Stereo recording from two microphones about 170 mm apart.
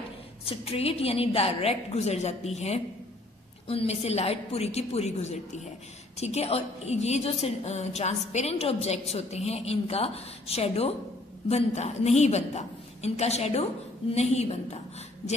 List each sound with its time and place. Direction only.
0.5 s a woman's voice: 35° left (ahead or behind)